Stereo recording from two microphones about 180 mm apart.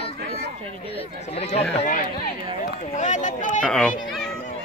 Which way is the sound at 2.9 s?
40° left (ahead or behind).